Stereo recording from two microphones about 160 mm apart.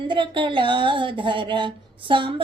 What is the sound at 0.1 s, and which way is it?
Speech, 30° right (ahead or behind).